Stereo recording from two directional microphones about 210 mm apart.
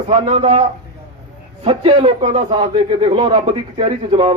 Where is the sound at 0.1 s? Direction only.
25° right (ahead or behind).